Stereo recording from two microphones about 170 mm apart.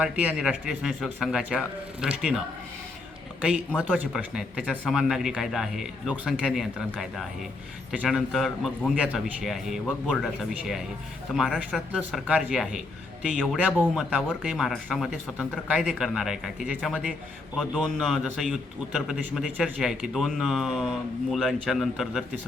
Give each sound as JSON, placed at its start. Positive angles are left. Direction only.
{"t": 0.0, "sound": "speech", "side_deg": -5}
{"t": 3.7, "sound": "speech", "side_deg": 5}
{"t": 3.9, "sound": "speech", "side_deg": -10}
{"t": 11.3, "sound": "speech", "side_deg": 0}